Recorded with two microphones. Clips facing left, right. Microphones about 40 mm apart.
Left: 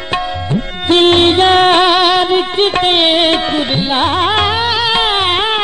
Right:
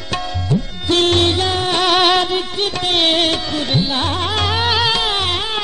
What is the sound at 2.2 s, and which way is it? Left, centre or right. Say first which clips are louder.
Music: left 7 dB; left.